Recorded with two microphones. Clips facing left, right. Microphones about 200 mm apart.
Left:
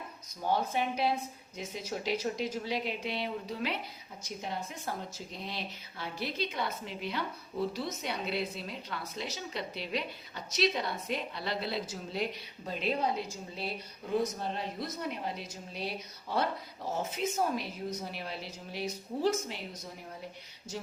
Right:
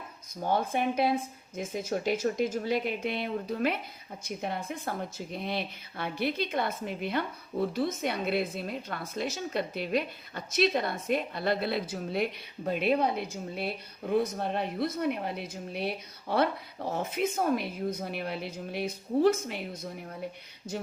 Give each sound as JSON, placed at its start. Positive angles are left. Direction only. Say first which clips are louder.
{"t": 0.4, "sound": "speech", "louder": "right 3 dB", "side_deg": -55}
{"t": 20.7, "sound": "speech", "louder": "right 5 dB", "side_deg": -60}